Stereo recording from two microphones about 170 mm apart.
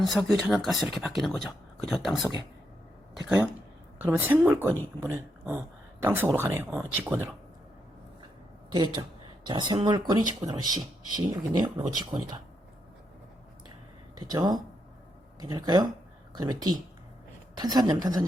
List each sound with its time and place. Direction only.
0.0 s speech: centre (ahead or behind)
8.7 s speech: 25° right (ahead or behind)
14.2 s speech: 25° right (ahead or behind)